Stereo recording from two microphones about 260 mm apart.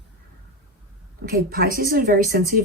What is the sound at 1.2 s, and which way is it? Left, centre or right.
Speech, right.